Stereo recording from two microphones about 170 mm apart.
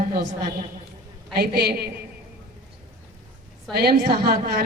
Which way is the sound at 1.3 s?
70° right (ahead or behind).